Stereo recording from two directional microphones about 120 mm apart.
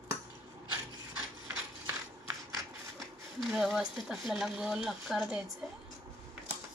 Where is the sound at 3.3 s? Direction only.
Centre (ahead or behind).